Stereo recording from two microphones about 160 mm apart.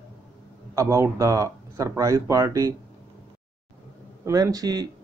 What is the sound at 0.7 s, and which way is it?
Speech, 20° right (ahead or behind).